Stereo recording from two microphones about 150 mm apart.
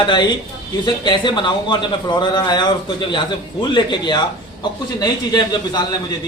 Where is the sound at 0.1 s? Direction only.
30° left (ahead or behind).